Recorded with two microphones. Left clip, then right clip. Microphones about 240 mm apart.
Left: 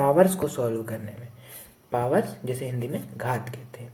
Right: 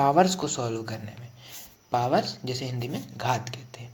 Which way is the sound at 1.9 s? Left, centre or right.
Right.